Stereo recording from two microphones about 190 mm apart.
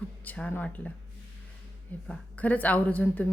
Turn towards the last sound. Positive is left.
turn(degrees=10)  # may be behind; listen again after turning